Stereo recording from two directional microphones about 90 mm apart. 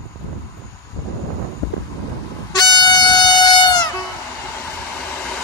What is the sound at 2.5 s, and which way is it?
Air horn, 50° left (ahead or behind).